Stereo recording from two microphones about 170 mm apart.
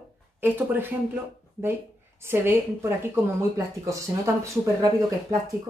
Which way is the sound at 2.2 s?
15° right (ahead or behind).